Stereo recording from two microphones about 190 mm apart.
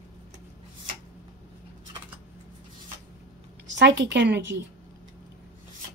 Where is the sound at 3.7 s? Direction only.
70° right (ahead or behind).